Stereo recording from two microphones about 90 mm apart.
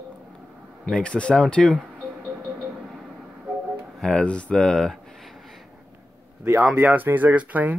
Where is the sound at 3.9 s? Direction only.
5° left (ahead or behind).